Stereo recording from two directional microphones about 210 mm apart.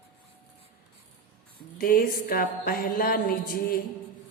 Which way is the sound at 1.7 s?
45° left (ahead or behind).